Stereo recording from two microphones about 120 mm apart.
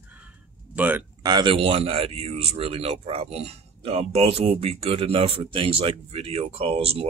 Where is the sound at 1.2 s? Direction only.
35° right (ahead or behind).